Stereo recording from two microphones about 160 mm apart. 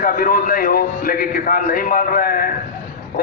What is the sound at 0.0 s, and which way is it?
A man's voice, 60° left (ahead or behind).